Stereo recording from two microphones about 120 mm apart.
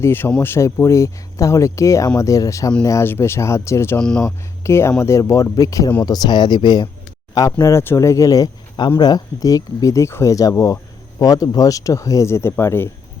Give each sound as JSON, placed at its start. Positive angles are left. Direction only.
{"t": 0.0, "sound": "speech", "side_deg": 20}
{"t": 7.6, "sound": "speech", "side_deg": 20}